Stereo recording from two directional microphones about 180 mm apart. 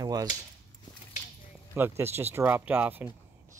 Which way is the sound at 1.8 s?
10° right (ahead or behind).